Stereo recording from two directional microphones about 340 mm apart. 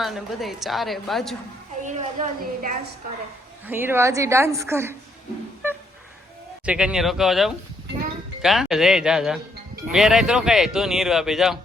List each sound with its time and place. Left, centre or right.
0.0 s speech: centre
1.8 s a woman's voice: right
3.7 s a woman's voice: centre
6.7 s speech: centre